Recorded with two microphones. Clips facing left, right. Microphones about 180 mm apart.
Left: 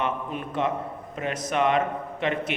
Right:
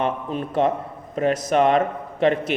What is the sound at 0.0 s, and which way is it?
A man's voice, 35° right (ahead or behind).